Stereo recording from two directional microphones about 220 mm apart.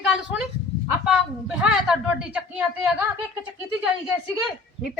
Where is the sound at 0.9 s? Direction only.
5° right (ahead or behind).